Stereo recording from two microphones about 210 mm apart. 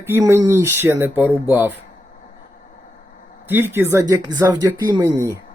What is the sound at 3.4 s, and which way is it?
A man's voice, 10° right (ahead or behind).